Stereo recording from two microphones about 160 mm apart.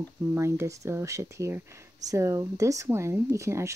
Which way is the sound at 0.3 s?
15° right (ahead or behind).